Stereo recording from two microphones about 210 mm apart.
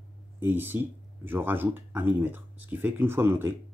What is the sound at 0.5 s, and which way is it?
Speech, 10° right (ahead or behind).